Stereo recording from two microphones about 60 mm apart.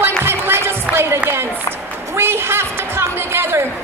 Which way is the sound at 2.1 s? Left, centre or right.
Right.